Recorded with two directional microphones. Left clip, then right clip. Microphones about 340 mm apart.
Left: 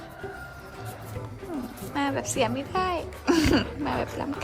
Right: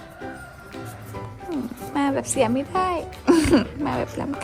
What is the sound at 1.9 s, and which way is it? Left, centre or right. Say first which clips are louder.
A woman's voice: right 5 dB; centre.